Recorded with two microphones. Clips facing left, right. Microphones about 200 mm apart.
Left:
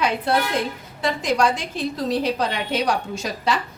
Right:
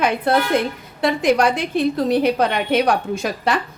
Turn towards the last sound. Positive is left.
turn(degrees=-55)  # may be behind; listen again after turning